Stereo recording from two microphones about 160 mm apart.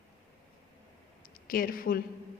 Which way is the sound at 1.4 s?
65° left (ahead or behind).